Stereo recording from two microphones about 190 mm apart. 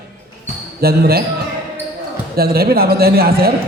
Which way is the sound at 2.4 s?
55° right (ahead or behind).